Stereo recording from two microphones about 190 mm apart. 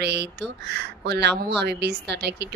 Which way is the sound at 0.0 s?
60° right (ahead or behind).